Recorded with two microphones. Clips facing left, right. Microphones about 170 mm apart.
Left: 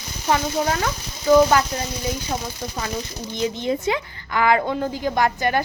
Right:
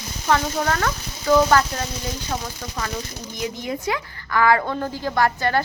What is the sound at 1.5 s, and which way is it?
Speech, 15° left (ahead or behind).